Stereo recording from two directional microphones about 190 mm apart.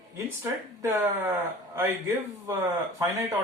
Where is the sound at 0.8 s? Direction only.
15° right (ahead or behind).